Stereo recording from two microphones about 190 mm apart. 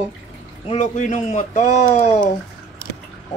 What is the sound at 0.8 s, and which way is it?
Speech, 40° left (ahead or behind).